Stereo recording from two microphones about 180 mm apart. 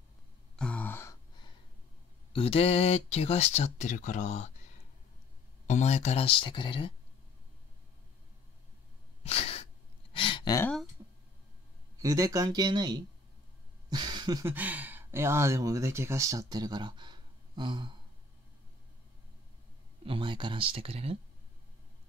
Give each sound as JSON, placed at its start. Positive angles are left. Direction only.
{"t": 0.6, "sound": "gasp", "side_deg": 5}
{"t": 2.3, "sound": "speech", "side_deg": 30}
{"t": 5.7, "sound": "speech", "side_deg": 40}
{"t": 9.2, "sound": "sneeze", "side_deg": 35}
{"t": 10.1, "sound": "a sound", "side_deg": 30}
{"t": 11.0, "sound": "a sound", "side_deg": -10}
{"t": 12.0, "sound": "speech", "side_deg": -20}
{"t": 13.8, "sound": "a sound", "side_deg": -25}
{"t": 14.5, "sound": "speech", "side_deg": -10}
{"t": 20.1, "sound": "speech", "side_deg": -30}